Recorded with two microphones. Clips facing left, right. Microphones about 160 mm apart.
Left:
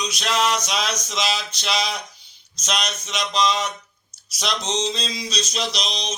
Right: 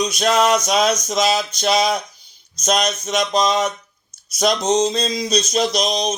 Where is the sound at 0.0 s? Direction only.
50° right (ahead or behind).